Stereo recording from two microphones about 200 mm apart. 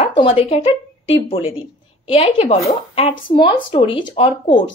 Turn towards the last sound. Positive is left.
turn(degrees=25)  # may be behind; listen again after turning